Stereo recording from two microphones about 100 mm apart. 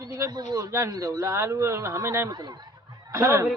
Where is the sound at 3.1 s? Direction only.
25° right (ahead or behind).